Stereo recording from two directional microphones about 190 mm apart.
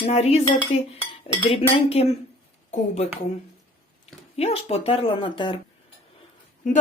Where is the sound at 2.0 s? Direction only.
35° left (ahead or behind).